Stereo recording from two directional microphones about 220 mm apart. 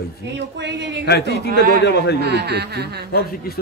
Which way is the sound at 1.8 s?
50° left (ahead or behind).